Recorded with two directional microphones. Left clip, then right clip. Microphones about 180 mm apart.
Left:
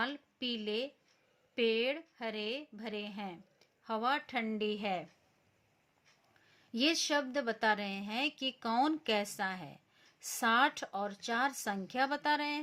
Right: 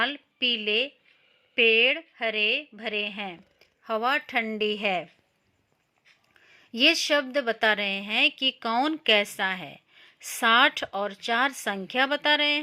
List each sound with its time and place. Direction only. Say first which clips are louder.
0.5 s a woman's voice: right 9 dB; 35° right (ahead or behind)
6.8 s a woman's voice: right 10 dB; 35° right (ahead or behind)